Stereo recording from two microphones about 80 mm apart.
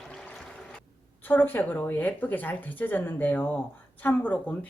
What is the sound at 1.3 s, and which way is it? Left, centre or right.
A woman's voice, left.